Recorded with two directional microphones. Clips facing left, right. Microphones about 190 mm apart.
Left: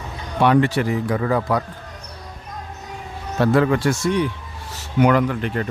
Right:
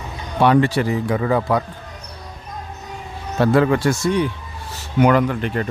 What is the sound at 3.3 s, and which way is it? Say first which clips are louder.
Speech: right 1 dB; 30° right (ahead or behind).